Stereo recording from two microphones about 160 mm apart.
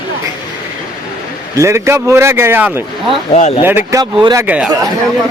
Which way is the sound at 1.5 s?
15° right (ahead or behind).